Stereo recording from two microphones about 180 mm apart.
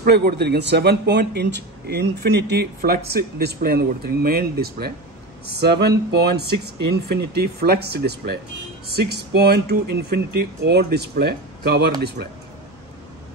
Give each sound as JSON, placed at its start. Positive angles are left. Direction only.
{"t": 0.0, "sound": "speech", "side_deg": -60}